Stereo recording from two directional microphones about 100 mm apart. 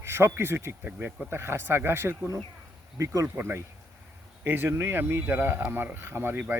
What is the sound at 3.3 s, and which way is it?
Speech, 20° right (ahead or behind).